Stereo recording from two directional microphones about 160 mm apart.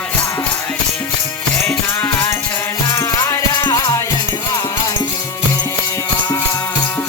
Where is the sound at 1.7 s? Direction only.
15° left (ahead or behind).